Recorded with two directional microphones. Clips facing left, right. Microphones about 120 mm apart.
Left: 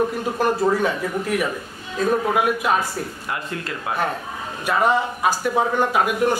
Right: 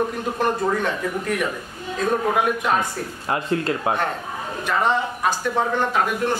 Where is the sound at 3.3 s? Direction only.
30° right (ahead or behind).